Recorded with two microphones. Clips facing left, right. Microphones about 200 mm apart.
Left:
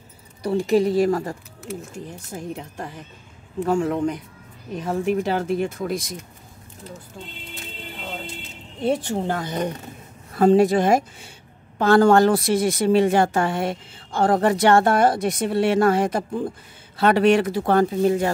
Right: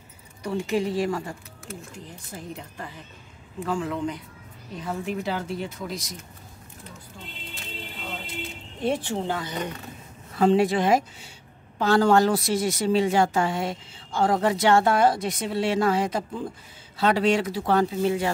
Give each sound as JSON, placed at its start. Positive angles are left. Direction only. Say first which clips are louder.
{"t": 0.4, "sound": "speech", "louder": "left 7 dB", "side_deg": 35}
{"t": 2.3, "sound": "a woman's voice", "louder": "left 5 dB", "side_deg": 50}
{"t": 8.8, "sound": "a woman's voice", "louder": "left 3 dB", "side_deg": 40}